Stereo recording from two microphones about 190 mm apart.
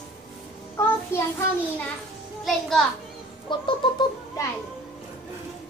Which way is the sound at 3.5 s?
25° left (ahead or behind).